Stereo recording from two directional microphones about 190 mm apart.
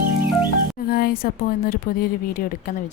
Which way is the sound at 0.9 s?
50° left (ahead or behind).